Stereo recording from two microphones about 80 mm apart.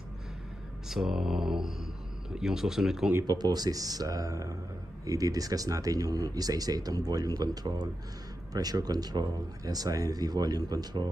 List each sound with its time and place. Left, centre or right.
0.8 s mantra: centre
3.3 s speech: right